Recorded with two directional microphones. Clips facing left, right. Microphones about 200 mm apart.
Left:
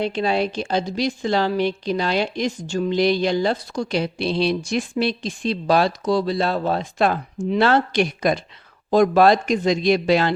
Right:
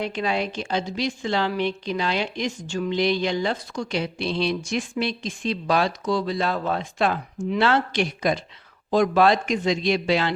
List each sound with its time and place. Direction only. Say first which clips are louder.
0.0 s a woman's voice: left 4 dB; 30° left (ahead or behind)